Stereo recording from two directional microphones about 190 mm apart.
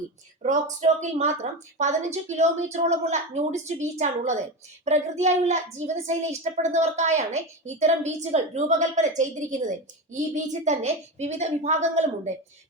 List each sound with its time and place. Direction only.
0.4 s a woman's voice: 40° right (ahead or behind)